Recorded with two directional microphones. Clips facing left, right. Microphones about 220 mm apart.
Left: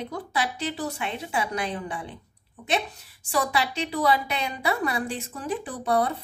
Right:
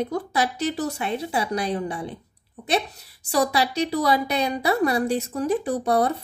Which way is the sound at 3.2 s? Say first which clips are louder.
Right 4 dB; 40° right (ahead or behind).